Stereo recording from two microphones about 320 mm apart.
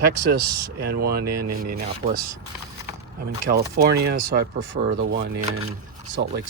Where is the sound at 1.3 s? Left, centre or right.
Right.